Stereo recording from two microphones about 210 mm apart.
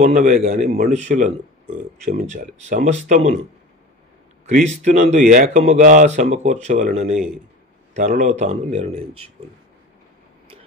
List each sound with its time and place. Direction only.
0.0 s speech: 35° right (ahead or behind)
4.5 s speech: 35° right (ahead or behind)